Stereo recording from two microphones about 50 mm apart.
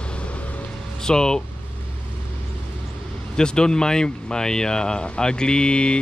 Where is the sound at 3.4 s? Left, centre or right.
Centre.